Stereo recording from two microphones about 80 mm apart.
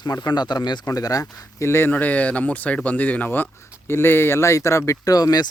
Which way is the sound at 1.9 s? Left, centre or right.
Centre.